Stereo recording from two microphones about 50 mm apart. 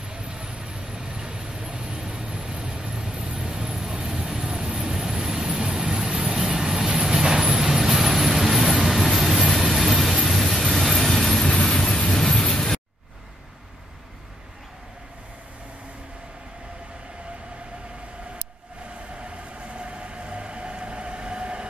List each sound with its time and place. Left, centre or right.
0.1 s vehicle: centre
19.1 s train: right